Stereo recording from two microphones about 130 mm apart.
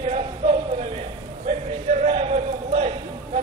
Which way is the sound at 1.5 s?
60° right (ahead or behind).